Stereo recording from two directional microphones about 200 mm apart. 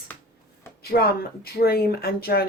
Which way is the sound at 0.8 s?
50° left (ahead or behind).